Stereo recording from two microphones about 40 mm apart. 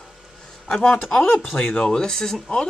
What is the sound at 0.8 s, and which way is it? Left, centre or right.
Speech, left.